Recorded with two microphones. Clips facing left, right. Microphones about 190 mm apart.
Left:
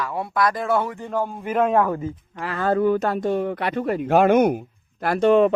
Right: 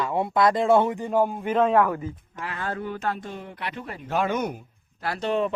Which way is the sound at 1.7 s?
25° left (ahead or behind).